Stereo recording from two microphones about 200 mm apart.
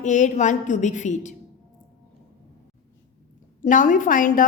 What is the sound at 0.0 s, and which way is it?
A woman's voice, 40° left (ahead or behind).